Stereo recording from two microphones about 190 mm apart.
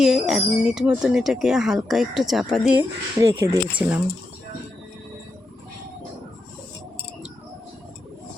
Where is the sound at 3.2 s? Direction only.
15° right (ahead or behind).